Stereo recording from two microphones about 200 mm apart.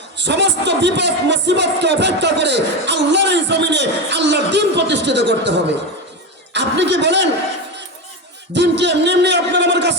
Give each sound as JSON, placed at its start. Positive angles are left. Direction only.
{"t": 0.2, "sound": "speech", "side_deg": -60}
{"t": 6.5, "sound": "a sound", "side_deg": -60}
{"t": 8.5, "sound": "a man's voice", "side_deg": -60}